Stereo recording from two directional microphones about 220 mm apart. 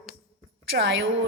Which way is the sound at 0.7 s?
55° right (ahead or behind).